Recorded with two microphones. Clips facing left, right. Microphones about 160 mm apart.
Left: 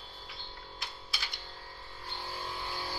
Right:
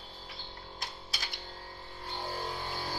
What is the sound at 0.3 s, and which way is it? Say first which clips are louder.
Typewriter: right 1 dB; 40° right (ahead or behind).